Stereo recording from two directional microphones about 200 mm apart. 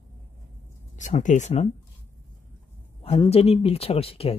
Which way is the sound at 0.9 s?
40° left (ahead or behind).